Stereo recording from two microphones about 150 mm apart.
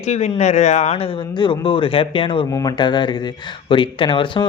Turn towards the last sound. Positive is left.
turn(degrees=35)  # may be behind; listen again after turning